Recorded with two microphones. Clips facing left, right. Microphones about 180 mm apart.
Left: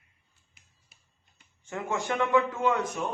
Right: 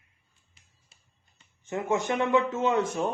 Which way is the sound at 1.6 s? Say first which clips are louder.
Right 4 dB; 20° right (ahead or behind).